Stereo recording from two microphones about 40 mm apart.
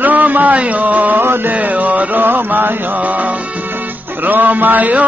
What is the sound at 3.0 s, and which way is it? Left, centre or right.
Music, right.